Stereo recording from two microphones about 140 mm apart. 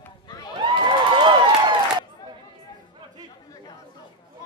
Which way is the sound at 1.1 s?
35° right (ahead or behind).